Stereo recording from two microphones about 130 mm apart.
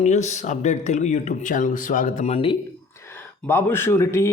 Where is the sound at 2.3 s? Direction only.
45° left (ahead or behind).